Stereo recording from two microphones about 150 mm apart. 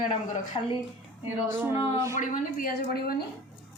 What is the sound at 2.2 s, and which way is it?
A woman's voice, 70° left (ahead or behind).